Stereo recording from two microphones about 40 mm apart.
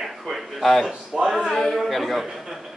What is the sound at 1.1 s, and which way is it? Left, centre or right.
Speech, centre.